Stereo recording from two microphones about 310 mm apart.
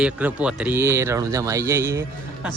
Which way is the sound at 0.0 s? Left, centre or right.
Centre.